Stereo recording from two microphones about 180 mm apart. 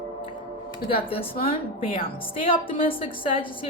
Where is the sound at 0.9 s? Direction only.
30° left (ahead or behind).